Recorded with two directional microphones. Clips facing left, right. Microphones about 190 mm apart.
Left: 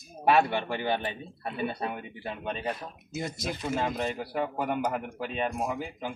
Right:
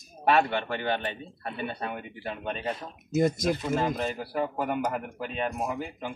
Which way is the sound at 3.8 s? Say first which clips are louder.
Right 1 dB; 5° left (ahead or behind).